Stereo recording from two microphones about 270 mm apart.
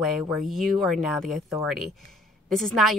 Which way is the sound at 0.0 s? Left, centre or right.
Centre.